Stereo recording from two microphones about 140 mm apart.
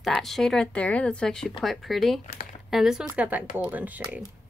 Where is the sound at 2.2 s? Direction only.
60° left (ahead or behind).